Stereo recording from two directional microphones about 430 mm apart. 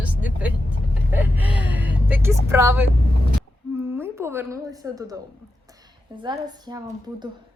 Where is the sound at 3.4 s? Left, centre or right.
Centre.